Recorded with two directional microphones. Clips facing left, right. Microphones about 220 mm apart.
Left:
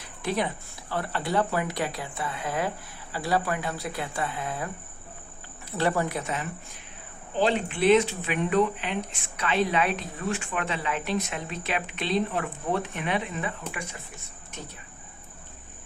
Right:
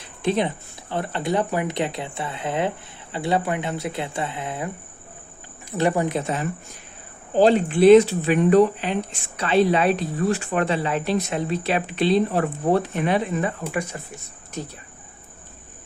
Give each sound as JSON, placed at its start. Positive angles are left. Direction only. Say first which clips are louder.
{"t": 0.2, "sound": "speech", "louder": "right 6 dB", "side_deg": -25}
{"t": 5.7, "sound": "speech", "louder": "right 5 dB", "side_deg": -20}
{"t": 6.2, "sound": "speech", "louder": "right 6 dB", "side_deg": -35}